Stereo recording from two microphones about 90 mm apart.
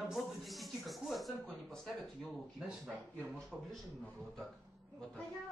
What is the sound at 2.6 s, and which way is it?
Speech, 10° right (ahead or behind).